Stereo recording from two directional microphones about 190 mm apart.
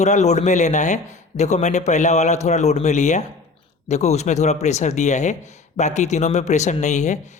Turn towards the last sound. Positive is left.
turn(degrees=40)  # may be behind; listen again after turning